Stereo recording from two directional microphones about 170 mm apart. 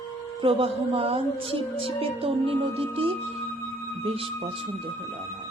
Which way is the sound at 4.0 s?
35° right (ahead or behind).